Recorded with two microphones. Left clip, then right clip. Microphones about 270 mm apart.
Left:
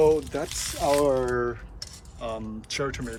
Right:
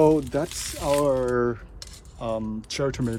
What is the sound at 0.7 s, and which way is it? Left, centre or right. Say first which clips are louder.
Speech: left 1 dB; centre.